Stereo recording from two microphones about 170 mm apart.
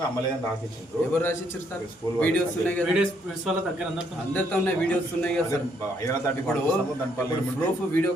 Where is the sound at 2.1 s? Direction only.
10° left (ahead or behind).